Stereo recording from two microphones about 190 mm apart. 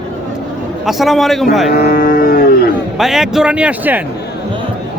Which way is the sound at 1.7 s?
50° left (ahead or behind).